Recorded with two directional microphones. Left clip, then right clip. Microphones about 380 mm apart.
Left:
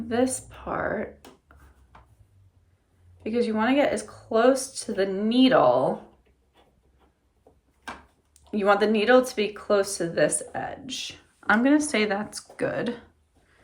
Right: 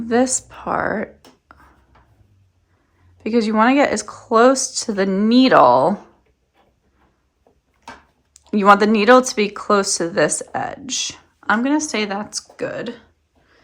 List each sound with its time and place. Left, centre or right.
0.1 s speech: centre
3.2 s speech: centre
8.4 s speech: centre